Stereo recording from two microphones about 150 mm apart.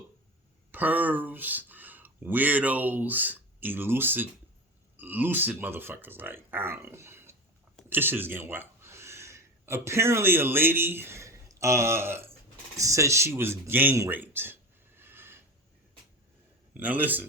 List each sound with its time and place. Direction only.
0.7 s speech: 10° right (ahead or behind)
16.7 s speech: 10° right (ahead or behind)